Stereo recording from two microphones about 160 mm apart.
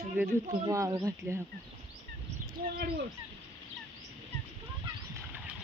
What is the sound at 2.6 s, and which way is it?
Speech, 70° right (ahead or behind).